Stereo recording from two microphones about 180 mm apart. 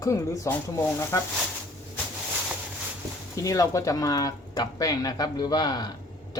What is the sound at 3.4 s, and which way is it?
Speech, 20° left (ahead or behind).